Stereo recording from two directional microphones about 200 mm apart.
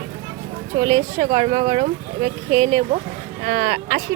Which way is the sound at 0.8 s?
90° right.